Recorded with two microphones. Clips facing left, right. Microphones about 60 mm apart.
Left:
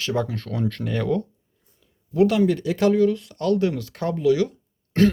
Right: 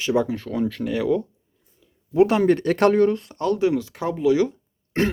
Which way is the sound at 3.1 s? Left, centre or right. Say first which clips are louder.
Even; right.